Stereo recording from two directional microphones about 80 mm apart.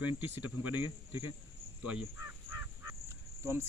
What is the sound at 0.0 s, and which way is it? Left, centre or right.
Speech, right.